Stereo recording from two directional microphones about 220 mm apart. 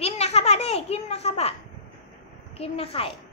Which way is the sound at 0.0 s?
30° left (ahead or behind).